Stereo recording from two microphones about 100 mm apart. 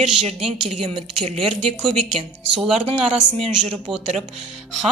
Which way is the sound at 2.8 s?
90° right.